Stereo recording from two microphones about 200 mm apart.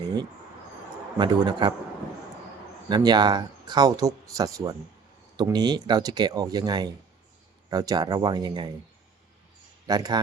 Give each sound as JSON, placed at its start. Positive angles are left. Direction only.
{"t": 1.2, "sound": "speech", "side_deg": -20}
{"t": 2.9, "sound": "speech", "side_deg": -20}
{"t": 9.8, "sound": "speech", "side_deg": -20}